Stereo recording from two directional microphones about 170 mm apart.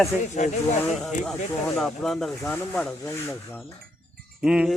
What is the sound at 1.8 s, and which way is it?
Speech, centre (ahead or behind).